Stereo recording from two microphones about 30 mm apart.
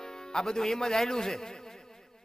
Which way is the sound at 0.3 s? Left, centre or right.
Left.